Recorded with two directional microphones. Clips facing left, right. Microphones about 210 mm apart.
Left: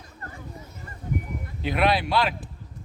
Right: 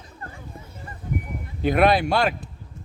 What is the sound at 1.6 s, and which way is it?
Speech, 50° right (ahead or behind).